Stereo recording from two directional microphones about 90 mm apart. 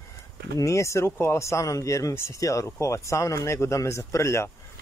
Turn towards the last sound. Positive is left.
turn(degrees=30)  # may be behind; listen again after turning